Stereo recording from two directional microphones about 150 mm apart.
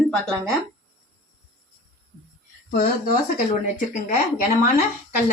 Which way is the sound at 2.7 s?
90° left.